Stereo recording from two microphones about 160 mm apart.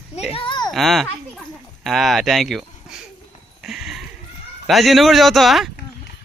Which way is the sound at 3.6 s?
5° right (ahead or behind).